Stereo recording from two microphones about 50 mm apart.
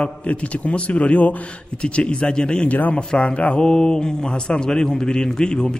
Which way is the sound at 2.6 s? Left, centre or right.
Left.